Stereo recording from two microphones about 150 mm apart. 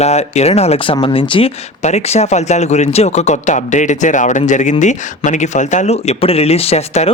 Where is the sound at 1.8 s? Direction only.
50° left (ahead or behind).